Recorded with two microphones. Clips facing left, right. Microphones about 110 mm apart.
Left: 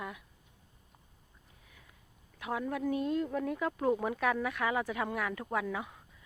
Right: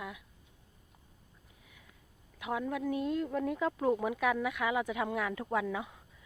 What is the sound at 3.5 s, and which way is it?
Speech, 15° right (ahead or behind).